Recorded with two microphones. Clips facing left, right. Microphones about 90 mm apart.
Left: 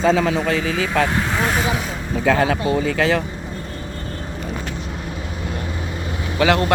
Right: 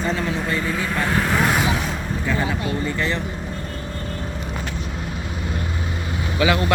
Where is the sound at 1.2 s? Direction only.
Centre (ahead or behind).